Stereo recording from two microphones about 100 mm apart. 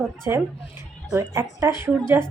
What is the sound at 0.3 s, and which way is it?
Speech, 25° right (ahead or behind).